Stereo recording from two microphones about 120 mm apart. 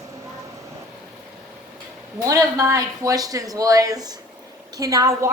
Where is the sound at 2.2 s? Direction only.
30° right (ahead or behind).